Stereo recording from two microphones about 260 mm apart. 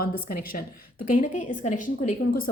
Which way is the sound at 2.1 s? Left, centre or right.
Left.